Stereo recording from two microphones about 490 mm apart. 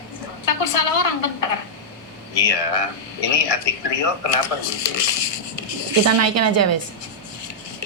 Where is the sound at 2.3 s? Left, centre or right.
Left.